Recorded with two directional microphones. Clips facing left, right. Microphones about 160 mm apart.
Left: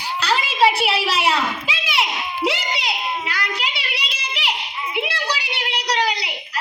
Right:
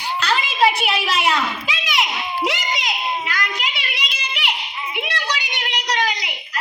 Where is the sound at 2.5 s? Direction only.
30° left (ahead or behind).